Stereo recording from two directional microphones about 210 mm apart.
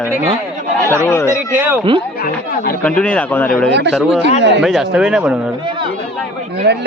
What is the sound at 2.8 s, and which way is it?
Speech, 5° left (ahead or behind).